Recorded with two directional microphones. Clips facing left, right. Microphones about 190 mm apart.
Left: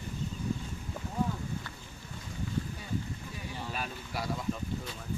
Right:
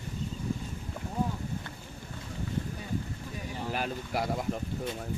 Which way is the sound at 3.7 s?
65° right (ahead or behind).